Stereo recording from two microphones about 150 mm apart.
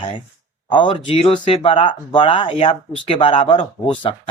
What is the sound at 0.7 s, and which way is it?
Speech, 35° left (ahead or behind).